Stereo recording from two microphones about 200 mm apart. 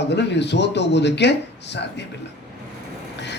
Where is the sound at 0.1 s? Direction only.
60° left (ahead or behind).